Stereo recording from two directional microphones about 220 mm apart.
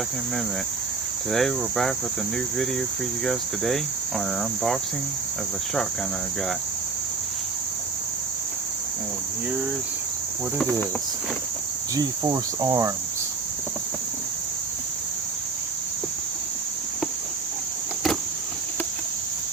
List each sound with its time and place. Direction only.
1.3 s speech: centre (ahead or behind)
3.2 s speech: centre (ahead or behind)
11.9 s speech: 15° right (ahead or behind)